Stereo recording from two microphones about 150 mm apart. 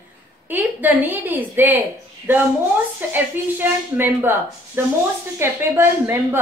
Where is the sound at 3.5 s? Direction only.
15° right (ahead or behind).